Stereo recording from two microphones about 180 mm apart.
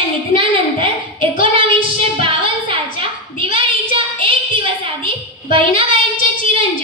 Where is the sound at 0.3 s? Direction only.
30° right (ahead or behind).